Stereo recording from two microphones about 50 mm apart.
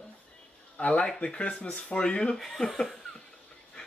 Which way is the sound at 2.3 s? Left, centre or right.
Centre.